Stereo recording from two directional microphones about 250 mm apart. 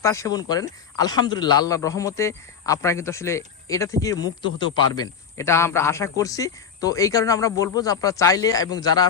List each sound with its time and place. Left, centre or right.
0.0 s speech: centre